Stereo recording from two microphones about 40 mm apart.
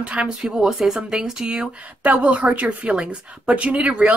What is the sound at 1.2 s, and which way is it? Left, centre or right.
Speech, centre.